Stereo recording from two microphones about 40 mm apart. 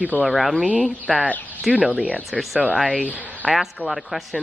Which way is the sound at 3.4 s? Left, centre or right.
Left.